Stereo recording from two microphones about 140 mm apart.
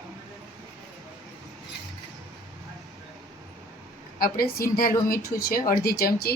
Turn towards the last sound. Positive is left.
turn(degrees=90)